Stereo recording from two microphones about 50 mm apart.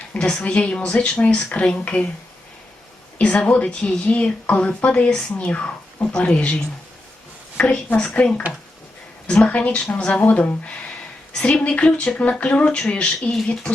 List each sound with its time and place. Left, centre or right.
0.1 s speech: left
3.2 s speech: left